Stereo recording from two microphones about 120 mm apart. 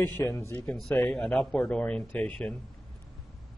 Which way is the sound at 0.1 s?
20° left (ahead or behind).